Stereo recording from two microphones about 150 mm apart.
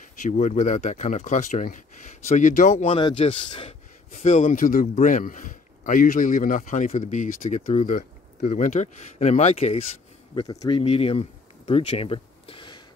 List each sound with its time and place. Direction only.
0.2 s speech: 55° left (ahead or behind)
2.9 s speech: 35° left (ahead or behind)
4.1 s speech: 55° left (ahead or behind)
10.3 s speech: 25° left (ahead or behind)
10.8 s a sound: 40° left (ahead or behind)